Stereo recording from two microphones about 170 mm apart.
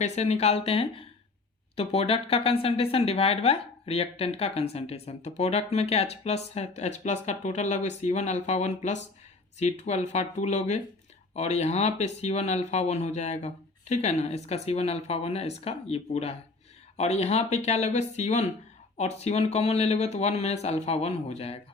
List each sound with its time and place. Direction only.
0.0 s speech: 40° left (ahead or behind)